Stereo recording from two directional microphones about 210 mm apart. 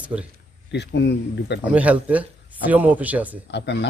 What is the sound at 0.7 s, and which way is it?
Speech, 55° left (ahead or behind).